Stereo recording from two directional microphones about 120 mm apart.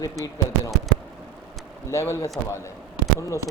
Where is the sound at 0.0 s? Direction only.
30° left (ahead or behind).